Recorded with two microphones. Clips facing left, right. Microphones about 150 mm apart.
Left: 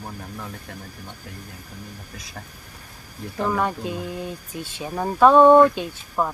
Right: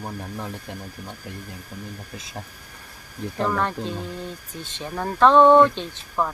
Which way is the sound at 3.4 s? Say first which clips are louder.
Left 1 dB; 10° left (ahead or behind).